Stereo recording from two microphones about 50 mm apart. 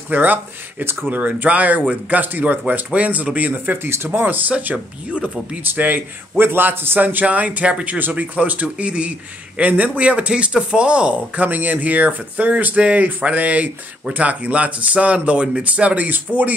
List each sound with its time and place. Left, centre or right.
0.1 s a man's voice: right
3.7 s a man's voice: right
5.6 s a man's voice: right